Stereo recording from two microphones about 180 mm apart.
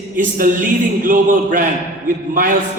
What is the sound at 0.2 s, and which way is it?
A man's voice, 50° right (ahead or behind).